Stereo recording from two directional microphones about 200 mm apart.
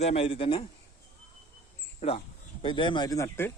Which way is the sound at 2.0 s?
30° left (ahead or behind).